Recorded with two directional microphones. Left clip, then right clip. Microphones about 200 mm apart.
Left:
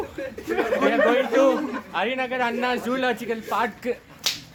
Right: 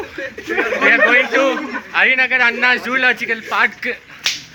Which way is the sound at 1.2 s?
15° right (ahead or behind).